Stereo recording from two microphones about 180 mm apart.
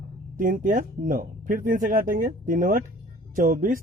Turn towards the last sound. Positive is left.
turn(degrees=-50)  # may be behind; listen again after turning